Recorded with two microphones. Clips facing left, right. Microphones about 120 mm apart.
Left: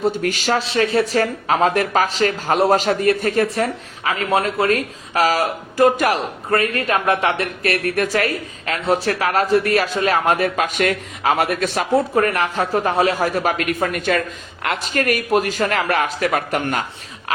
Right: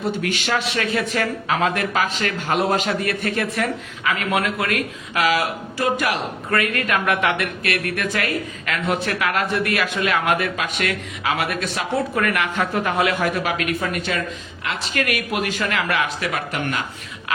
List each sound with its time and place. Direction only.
0.0 s speech: 40° left (ahead or behind)
14.9 s speech: 40° left (ahead or behind)